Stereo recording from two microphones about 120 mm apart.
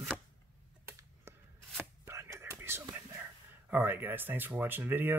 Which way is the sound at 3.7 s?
15° right (ahead or behind).